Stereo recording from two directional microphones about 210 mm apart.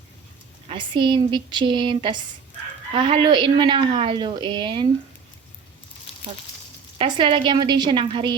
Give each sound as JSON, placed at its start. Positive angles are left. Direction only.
{"t": 0.7, "sound": "a woman's voice", "side_deg": -20}
{"t": 7.0, "sound": "a woman's voice", "side_deg": -25}